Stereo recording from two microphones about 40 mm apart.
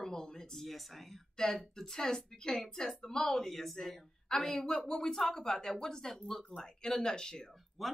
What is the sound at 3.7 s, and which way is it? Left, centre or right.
Speech, centre.